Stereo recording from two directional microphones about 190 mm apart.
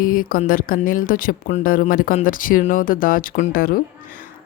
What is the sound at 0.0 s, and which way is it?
Speech, 50° left (ahead or behind).